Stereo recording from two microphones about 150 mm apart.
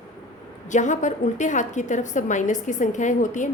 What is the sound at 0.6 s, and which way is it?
A woman's voice, 55° left (ahead or behind).